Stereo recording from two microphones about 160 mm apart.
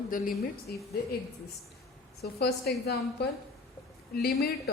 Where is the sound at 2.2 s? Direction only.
85° left.